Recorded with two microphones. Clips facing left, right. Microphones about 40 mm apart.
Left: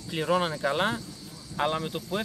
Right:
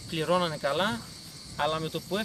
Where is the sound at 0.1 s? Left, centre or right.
Centre.